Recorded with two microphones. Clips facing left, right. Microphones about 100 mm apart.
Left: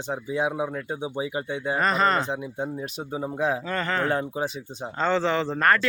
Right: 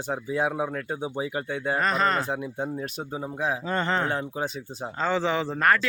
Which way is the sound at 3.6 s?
25° right (ahead or behind).